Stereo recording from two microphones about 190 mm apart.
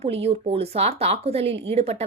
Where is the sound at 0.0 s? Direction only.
30° right (ahead or behind).